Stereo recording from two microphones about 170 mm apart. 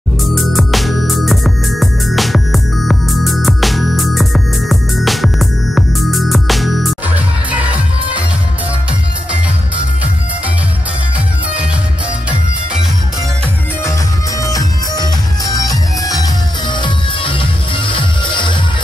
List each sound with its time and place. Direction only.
0.3 s music: centre (ahead or behind)
14.4 s music: 20° left (ahead or behind)